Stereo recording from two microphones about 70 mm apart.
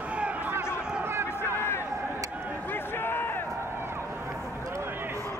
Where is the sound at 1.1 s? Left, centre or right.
Right.